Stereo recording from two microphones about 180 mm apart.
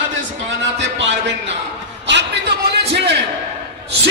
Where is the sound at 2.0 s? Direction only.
75° right (ahead or behind).